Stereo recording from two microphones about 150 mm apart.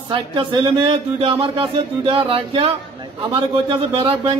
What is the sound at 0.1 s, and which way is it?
A man's voice, 30° right (ahead or behind).